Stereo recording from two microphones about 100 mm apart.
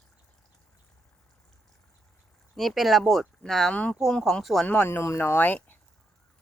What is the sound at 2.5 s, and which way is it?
Speech, centre (ahead or behind).